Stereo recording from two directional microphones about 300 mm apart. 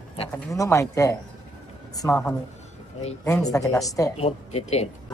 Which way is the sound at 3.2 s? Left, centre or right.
Centre.